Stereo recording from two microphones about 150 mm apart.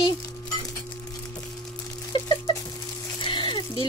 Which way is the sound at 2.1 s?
30° left (ahead or behind).